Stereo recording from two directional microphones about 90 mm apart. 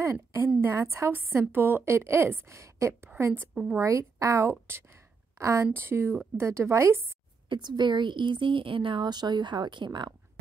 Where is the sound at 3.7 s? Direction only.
35° right (ahead or behind).